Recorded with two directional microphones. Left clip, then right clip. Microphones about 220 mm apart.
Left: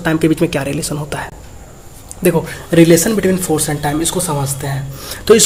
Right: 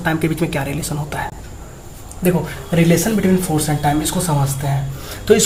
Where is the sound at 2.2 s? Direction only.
45° left (ahead or behind).